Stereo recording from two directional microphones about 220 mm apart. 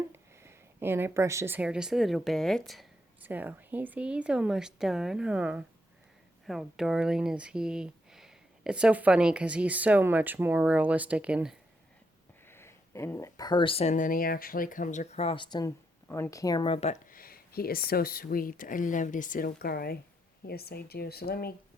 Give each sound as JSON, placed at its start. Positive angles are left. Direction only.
{"t": 0.1, "sound": "a woman's voice", "side_deg": -10}
{"t": 12.5, "sound": "speech", "side_deg": 10}